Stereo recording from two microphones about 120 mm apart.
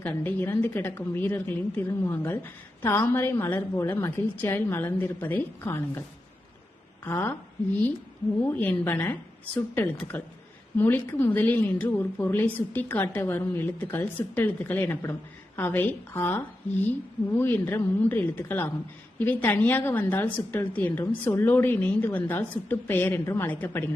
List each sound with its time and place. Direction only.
0.0 s a woman's voice: 15° left (ahead or behind)
7.0 s a woman's voice: 15° left (ahead or behind)